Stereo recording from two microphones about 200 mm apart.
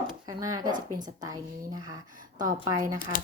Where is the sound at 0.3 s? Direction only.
15° right (ahead or behind).